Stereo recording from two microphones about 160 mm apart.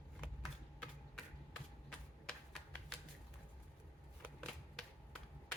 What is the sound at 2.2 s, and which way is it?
Typewriter, 5° left (ahead or behind).